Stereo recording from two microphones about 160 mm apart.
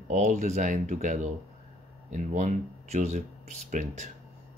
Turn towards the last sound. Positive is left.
turn(degrees=-45)  # may be behind; listen again after turning